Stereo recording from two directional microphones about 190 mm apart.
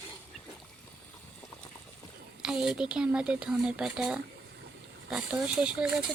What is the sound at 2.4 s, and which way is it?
Speech, 5° right (ahead or behind).